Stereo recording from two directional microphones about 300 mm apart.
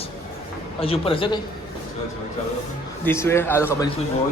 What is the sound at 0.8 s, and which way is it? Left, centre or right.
Speech, centre.